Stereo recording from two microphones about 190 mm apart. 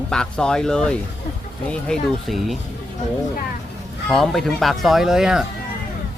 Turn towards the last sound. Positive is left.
turn(degrees=-5)  # may be behind; listen again after turning